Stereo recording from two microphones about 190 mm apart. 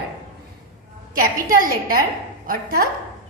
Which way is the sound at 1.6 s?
50° right (ahead or behind).